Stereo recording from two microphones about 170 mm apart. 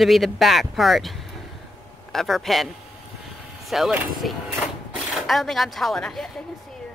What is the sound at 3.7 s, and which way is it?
Speech, centre (ahead or behind).